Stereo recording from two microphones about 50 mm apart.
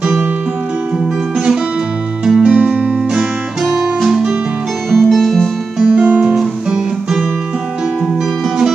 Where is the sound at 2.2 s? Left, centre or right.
Centre.